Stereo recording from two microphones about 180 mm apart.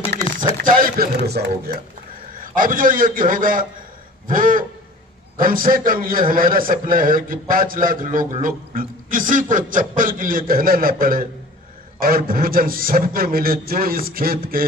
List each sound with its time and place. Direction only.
0.7 s a man's voice: 50° right (ahead or behind)
2.5 s a man's voice: 50° right (ahead or behind)